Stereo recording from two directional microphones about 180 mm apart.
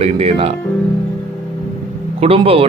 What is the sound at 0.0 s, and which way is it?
Speech, 35° right (ahead or behind).